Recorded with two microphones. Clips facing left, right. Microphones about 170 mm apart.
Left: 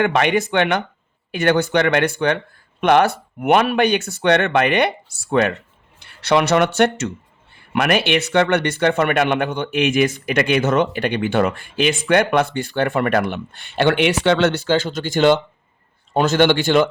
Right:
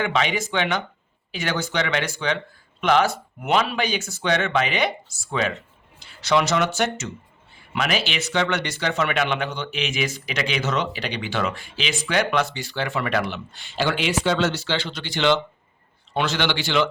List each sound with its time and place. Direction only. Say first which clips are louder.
0.0 s speech: left 6 dB; 60° left (ahead or behind)